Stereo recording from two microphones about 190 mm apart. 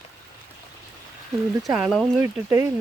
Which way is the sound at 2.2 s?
15° right (ahead or behind).